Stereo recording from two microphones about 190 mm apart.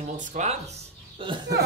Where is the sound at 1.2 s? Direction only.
25° right (ahead or behind).